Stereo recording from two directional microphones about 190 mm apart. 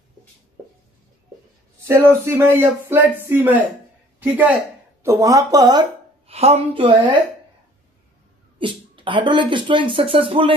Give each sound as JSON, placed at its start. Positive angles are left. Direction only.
{"t": 1.9, "sound": "speech", "side_deg": -10}
{"t": 8.5, "sound": "speech", "side_deg": -25}